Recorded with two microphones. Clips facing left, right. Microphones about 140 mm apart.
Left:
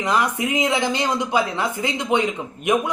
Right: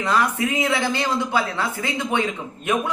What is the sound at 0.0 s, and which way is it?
A man's voice, 15° left (ahead or behind).